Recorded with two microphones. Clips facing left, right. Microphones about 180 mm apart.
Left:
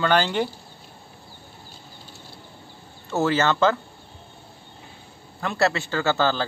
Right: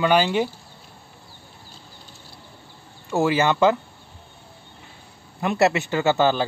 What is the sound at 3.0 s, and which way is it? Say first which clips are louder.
Speech: right 2 dB; 15° right (ahead or behind).